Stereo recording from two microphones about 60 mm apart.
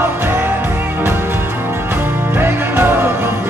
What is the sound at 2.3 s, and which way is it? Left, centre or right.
Music, right.